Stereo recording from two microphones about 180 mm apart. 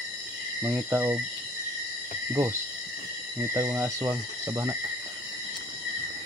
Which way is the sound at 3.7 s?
15° right (ahead or behind).